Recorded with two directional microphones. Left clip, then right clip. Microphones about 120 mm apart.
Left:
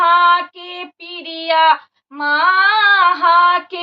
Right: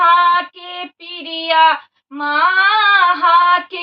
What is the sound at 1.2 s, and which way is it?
Child singing, 45° left (ahead or behind).